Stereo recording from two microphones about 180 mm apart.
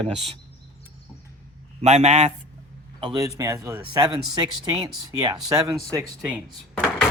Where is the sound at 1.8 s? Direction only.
40° right (ahead or behind).